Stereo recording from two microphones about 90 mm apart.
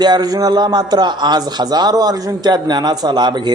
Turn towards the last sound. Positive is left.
turn(degrees=-55)  # may be behind; listen again after turning